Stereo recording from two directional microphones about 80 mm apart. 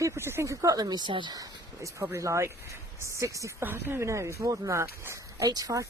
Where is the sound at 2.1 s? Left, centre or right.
Right.